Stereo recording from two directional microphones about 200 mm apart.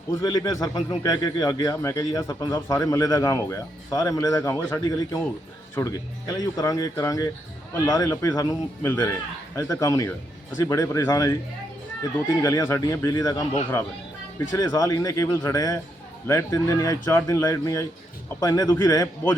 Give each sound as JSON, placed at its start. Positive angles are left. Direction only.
{"t": 0.1, "sound": "speech", "side_deg": 20}
{"t": 12.4, "sound": "speech", "side_deg": 15}
{"t": 14.5, "sound": "speech", "side_deg": 15}